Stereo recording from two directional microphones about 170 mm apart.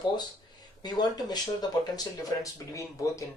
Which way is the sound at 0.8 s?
25° left (ahead or behind).